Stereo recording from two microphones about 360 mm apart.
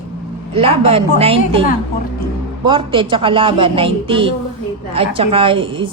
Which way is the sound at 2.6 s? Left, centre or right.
Centre.